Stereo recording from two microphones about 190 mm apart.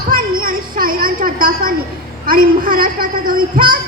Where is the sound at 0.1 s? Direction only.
50° right (ahead or behind).